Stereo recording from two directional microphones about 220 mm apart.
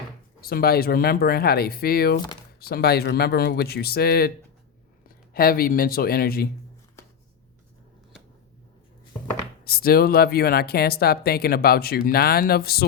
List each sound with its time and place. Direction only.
0.4 s speech: 45° left (ahead or behind)
9.6 s speech: 45° left (ahead or behind)